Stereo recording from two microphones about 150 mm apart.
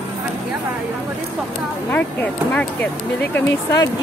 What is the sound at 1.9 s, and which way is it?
Speech, 10° left (ahead or behind).